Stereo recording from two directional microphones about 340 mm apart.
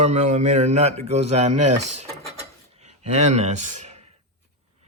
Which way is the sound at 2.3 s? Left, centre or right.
Centre.